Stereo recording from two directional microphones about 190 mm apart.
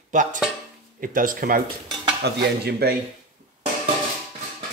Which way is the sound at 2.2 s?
60° right (ahead or behind).